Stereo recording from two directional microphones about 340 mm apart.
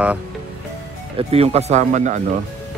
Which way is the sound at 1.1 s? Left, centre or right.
Centre.